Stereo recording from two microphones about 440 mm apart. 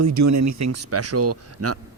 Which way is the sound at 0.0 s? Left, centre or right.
Right.